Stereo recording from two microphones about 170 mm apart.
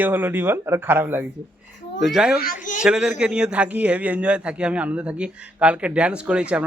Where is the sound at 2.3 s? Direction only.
55° left (ahead or behind).